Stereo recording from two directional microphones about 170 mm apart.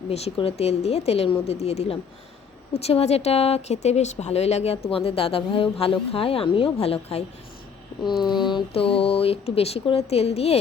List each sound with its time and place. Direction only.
0.1 s speech: 35° left (ahead or behind)
8.4 s speech: 25° left (ahead or behind)